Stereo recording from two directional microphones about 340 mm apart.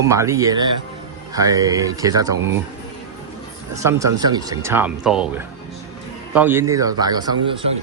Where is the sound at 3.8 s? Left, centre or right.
Centre.